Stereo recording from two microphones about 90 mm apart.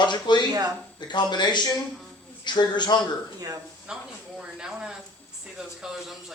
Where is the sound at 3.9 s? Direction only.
5° right (ahead or behind).